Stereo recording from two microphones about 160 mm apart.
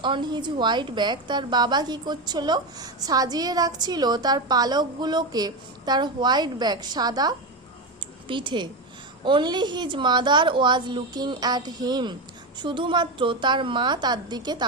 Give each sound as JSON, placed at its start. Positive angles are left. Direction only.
{"t": 0.0, "sound": "a woman's voice", "side_deg": -30}